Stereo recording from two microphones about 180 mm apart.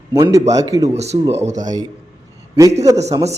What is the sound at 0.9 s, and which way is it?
Speech, 35° right (ahead or behind).